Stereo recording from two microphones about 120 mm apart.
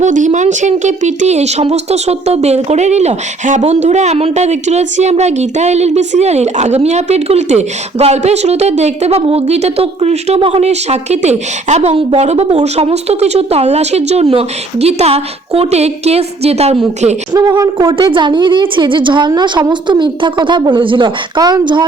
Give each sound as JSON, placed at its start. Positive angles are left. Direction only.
{"t": 0.0, "sound": "speech", "side_deg": -85}
{"t": 17.3, "sound": "a woman's voice", "side_deg": -35}